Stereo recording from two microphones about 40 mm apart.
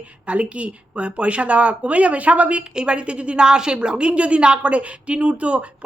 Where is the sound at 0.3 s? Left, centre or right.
Right.